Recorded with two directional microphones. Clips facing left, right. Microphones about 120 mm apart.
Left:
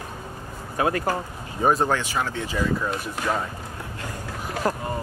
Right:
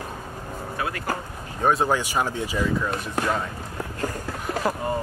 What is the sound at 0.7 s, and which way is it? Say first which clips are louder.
Speech: left 7 dB; 35° left (ahead or behind).